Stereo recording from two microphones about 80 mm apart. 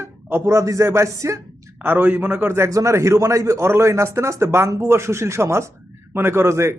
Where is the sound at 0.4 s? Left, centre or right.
Right.